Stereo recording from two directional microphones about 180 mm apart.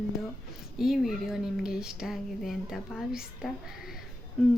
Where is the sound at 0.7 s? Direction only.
Centre (ahead or behind).